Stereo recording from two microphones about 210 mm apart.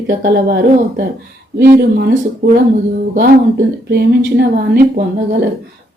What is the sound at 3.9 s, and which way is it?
Speech, 50° right (ahead or behind).